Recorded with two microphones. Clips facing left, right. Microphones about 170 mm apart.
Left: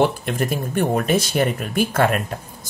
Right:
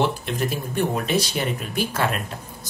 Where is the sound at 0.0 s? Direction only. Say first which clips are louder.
Left 4 dB; 50° left (ahead or behind).